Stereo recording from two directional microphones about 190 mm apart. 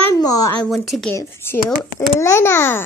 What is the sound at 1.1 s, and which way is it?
A child's voice, 15° left (ahead or behind).